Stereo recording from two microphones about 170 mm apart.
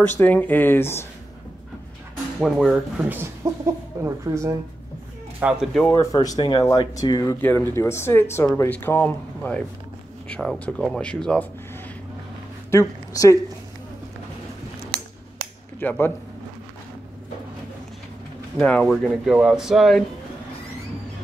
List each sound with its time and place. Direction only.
0.2 s speech: 10° left (ahead or behind)
2.4 s speech: centre (ahead or behind)
3.0 s speech: 15° right (ahead or behind)
5.4 s speech: centre (ahead or behind)
5.9 s speech: 20° left (ahead or behind); by 11.4 s 5° left (ahead or behind)
12.7 s speech: 20° left (ahead or behind)
15.8 s speech: 10° left (ahead or behind)
18.6 s speech: 5° left (ahead or behind)
19.2 s speech: 5° right (ahead or behind)